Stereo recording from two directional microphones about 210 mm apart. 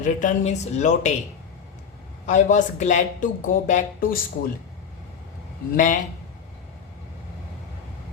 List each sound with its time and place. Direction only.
0.0 s speech: 35° left (ahead or behind)
2.2 s speech: 35° left (ahead or behind)
5.7 s speech: 40° left (ahead or behind)